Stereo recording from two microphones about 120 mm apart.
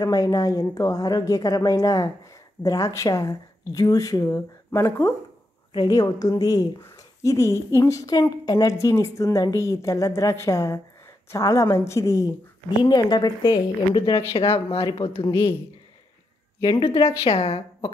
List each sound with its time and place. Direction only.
0.0 s speech: 30° left (ahead or behind)
5.7 s a woman's voice: 30° left (ahead or behind); by 14.9 s 50° left (ahead or behind)
14.9 s a woman's voice: 40° left (ahead or behind)
16.8 s a woman's voice: 50° left (ahead or behind)